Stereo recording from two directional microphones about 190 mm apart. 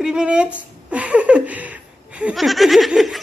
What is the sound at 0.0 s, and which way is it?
Speech, 5° right (ahead or behind).